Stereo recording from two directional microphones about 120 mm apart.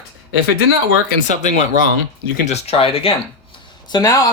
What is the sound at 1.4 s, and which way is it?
Speech, 65° left (ahead or behind).